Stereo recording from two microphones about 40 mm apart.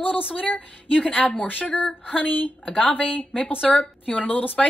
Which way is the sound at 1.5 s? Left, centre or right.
Left.